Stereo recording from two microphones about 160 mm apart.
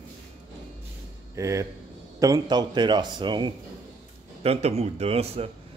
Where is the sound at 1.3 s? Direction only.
20° right (ahead or behind).